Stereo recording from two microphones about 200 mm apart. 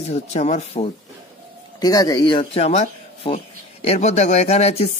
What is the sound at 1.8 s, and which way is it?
Speech, 20° left (ahead or behind).